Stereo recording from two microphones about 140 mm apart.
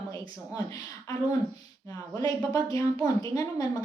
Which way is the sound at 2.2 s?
25° left (ahead or behind).